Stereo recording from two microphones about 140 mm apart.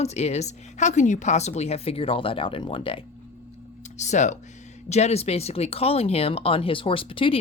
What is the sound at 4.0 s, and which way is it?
Speech, 60° left (ahead or behind).